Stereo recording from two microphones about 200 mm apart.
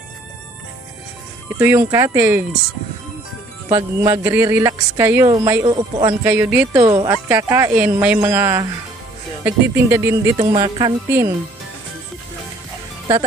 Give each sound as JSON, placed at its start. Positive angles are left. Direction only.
{"t": 1.6, "sound": "a woman's voice", "side_deg": -10}
{"t": 3.6, "sound": "a woman's voice", "side_deg": -15}
{"t": 6.2, "sound": "a woman's voice", "side_deg": -10}